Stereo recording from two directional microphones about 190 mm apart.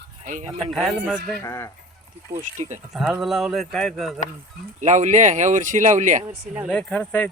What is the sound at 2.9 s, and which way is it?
Speech, centre (ahead or behind).